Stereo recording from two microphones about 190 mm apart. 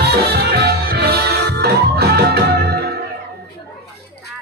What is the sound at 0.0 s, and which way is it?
Music, 60° right (ahead or behind).